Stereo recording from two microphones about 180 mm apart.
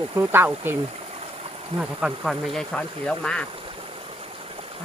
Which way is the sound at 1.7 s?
Centre (ahead or behind).